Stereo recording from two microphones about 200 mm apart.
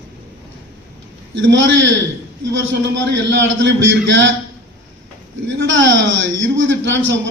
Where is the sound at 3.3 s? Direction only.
65° right (ahead or behind).